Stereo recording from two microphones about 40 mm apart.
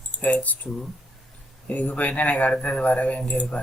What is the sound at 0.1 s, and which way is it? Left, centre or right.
Computer keyboard, left.